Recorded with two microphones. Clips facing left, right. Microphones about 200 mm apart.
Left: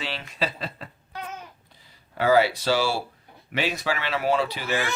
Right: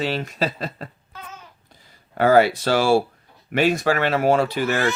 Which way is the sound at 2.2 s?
50° right (ahead or behind).